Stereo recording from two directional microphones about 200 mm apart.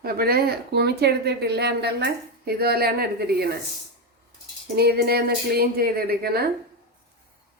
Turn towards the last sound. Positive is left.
turn(degrees=-50)  # may be behind; listen again after turning